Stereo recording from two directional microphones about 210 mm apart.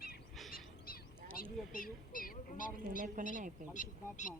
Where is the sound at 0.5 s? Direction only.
45° left (ahead or behind).